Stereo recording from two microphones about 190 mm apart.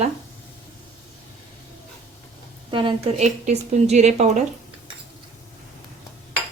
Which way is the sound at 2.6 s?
25° right (ahead or behind).